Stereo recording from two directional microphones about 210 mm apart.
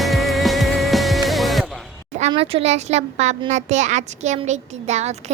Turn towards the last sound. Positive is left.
turn(degrees=-35)  # may be behind; listen again after turning